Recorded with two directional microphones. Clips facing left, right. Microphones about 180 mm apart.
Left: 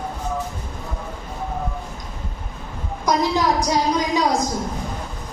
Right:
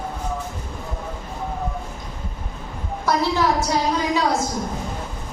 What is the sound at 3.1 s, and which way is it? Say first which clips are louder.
A woman's voice: left 1 dB; 15° left (ahead or behind).